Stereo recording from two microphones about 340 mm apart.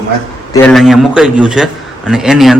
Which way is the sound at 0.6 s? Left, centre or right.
Centre.